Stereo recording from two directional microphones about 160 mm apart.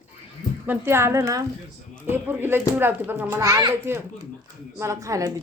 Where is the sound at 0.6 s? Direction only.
15° right (ahead or behind).